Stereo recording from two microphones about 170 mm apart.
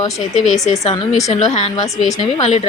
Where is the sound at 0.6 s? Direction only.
40° left (ahead or behind).